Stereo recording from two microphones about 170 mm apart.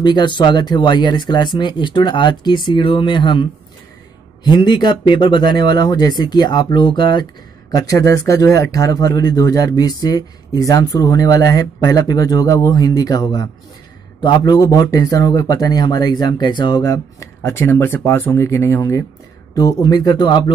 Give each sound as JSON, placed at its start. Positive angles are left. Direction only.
{"t": 0.0, "sound": "speech", "side_deg": 25}
{"t": 4.5, "sound": "speech", "side_deg": 25}